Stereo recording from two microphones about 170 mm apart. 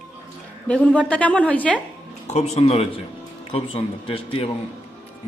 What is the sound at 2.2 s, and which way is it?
A man's voice, 40° left (ahead or behind).